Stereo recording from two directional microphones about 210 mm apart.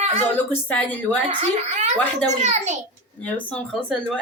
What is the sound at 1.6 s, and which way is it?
A woman's voice, 35° right (ahead or behind).